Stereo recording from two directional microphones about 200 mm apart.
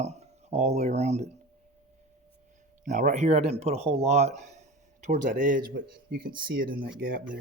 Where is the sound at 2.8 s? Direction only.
40° right (ahead or behind).